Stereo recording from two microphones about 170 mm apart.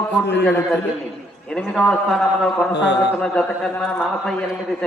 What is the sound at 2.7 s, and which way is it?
Speech, 90° left.